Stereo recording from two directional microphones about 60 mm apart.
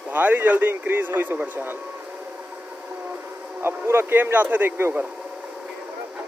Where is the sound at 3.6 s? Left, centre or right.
Right.